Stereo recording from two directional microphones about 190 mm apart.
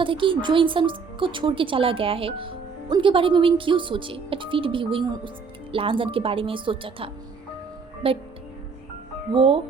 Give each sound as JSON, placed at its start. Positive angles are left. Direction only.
{"t": 0.0, "sound": "speech", "side_deg": -25}
{"t": 9.3, "sound": "speech", "side_deg": -30}